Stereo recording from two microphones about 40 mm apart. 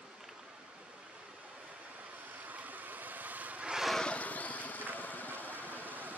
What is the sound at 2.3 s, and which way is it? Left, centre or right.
Vehicle, right.